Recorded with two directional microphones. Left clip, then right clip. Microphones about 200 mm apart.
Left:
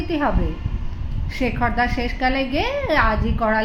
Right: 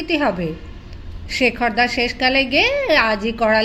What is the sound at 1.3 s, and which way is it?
A woman's voice, 35° right (ahead or behind).